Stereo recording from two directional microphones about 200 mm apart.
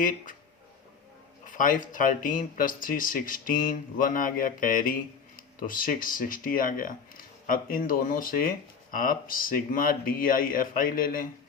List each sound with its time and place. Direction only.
1.5 s speech: 40° left (ahead or behind)